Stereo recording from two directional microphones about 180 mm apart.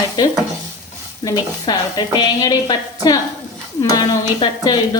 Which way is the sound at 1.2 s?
25° left (ahead or behind).